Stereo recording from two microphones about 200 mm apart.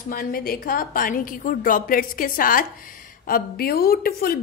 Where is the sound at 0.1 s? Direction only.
45° left (ahead or behind).